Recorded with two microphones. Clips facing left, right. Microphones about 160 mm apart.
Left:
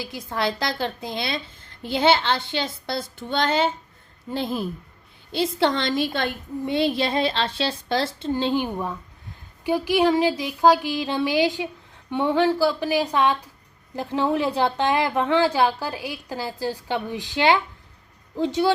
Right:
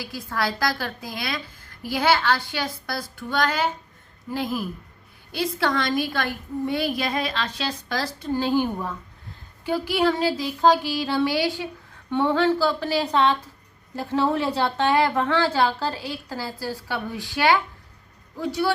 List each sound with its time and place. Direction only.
0.0 s a woman's voice: 20° left (ahead or behind)